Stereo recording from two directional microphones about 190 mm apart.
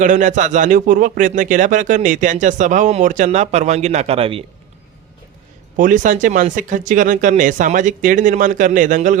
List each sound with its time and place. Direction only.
0.0 s speech: 40° right (ahead or behind)
5.7 s speech: 45° right (ahead or behind)